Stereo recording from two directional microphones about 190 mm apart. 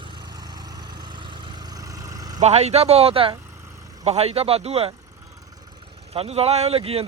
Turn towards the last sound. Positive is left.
turn(degrees=-30)  # may be behind; listen again after turning